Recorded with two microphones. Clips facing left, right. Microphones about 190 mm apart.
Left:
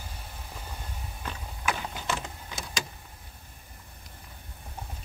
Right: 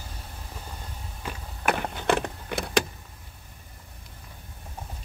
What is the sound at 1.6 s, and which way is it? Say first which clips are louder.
Power windows: right 6 dB; 60° right (ahead or behind).